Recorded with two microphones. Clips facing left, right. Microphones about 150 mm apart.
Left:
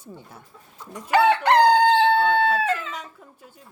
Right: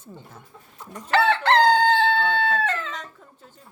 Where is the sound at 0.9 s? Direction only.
10° left (ahead or behind).